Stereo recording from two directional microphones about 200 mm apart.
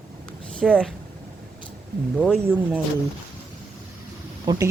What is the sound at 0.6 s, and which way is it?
Speech, 5° left (ahead or behind).